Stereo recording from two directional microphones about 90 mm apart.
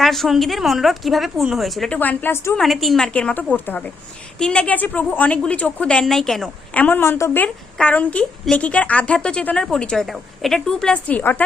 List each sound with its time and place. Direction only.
0.0 s a woman's voice: centre (ahead or behind)
1.9 s a woman's voice: 20° left (ahead or behind)
2.6 s a woman's voice: centre (ahead or behind)
3.1 s a woman's voice: 10° left (ahead or behind)
6.7 s a woman's voice: 20° left (ahead or behind)